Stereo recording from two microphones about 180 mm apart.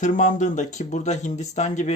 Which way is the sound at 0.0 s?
45° left (ahead or behind).